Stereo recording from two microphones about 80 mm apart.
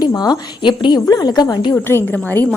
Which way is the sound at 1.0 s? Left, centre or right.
Left.